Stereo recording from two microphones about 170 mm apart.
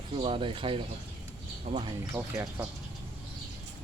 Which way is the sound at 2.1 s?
10° right (ahead or behind).